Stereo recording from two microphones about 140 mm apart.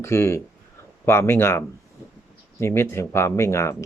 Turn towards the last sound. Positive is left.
turn(degrees=20)  # may be behind; listen again after turning